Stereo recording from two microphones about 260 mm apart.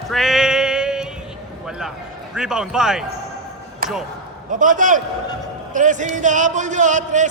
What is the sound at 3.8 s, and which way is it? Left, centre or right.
Basketball bounce, right.